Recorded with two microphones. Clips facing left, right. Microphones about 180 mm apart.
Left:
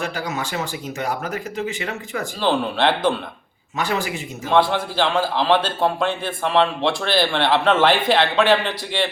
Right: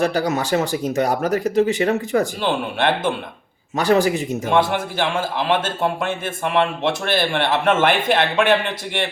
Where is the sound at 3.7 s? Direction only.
40° right (ahead or behind).